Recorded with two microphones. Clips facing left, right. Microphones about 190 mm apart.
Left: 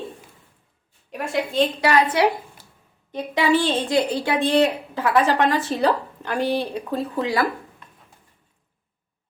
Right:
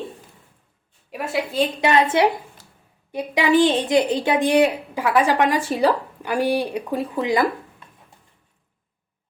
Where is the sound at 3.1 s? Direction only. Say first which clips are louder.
Right 2 dB; 10° right (ahead or behind).